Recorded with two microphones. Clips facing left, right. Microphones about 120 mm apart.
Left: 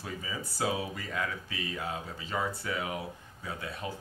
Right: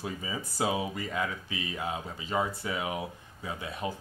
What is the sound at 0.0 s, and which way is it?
Speech, 20° right (ahead or behind).